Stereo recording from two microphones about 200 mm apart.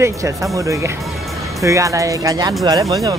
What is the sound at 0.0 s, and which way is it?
Speech, 15° right (ahead or behind).